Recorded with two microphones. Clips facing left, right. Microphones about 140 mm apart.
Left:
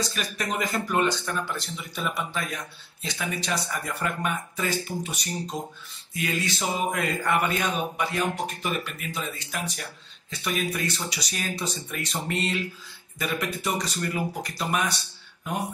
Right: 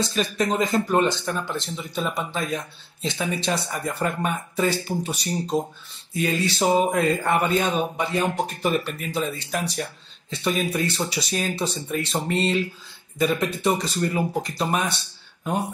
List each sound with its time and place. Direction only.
0.0 s speech: 25° right (ahead or behind)
8.6 s speech: 35° right (ahead or behind)